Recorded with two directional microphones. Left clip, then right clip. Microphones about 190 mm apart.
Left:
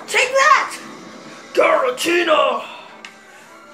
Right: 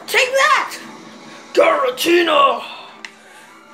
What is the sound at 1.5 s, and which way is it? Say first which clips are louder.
Music: right 1 dB; 40° right (ahead or behind).